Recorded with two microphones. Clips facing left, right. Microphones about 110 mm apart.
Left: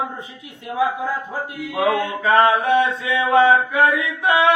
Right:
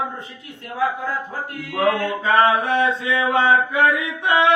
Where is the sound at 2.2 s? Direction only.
30° left (ahead or behind).